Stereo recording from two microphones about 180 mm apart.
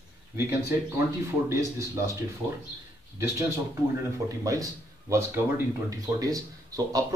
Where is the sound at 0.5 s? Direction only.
15° right (ahead or behind).